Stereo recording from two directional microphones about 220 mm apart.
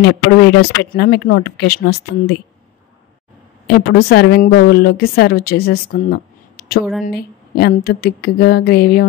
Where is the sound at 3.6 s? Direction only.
45° left (ahead or behind).